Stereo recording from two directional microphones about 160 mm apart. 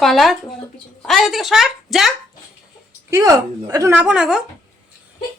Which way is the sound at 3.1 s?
15° right (ahead or behind).